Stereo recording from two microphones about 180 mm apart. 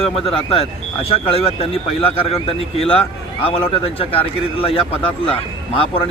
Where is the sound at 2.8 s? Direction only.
30° left (ahead or behind).